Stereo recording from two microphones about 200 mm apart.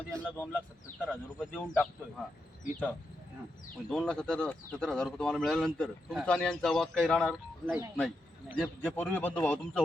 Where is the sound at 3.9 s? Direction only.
5° left (ahead or behind).